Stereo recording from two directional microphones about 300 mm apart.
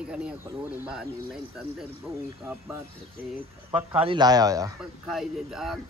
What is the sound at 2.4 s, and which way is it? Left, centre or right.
Speech, centre.